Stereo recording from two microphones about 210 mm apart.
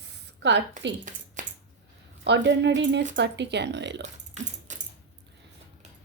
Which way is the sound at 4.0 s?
35° right (ahead or behind).